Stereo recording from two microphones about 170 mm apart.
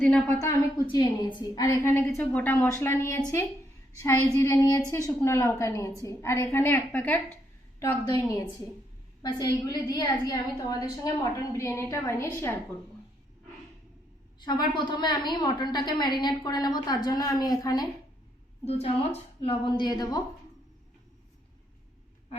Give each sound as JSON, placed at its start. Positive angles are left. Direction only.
{"t": 0.0, "sound": "a woman's voice", "side_deg": 10}
{"t": 0.3, "sound": "a woman's voice", "side_deg": 20}
{"t": 4.4, "sound": "a woman's voice", "side_deg": 15}
{"t": 14.3, "sound": "a woman's voice", "side_deg": 25}
{"t": 18.6, "sound": "a woman's voice", "side_deg": 35}